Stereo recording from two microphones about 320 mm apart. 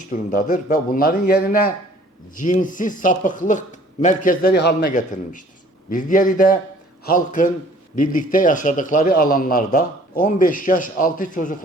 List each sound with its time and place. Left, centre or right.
0.1 s a man's voice: left